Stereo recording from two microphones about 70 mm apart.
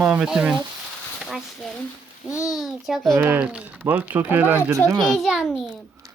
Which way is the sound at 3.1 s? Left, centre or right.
Right.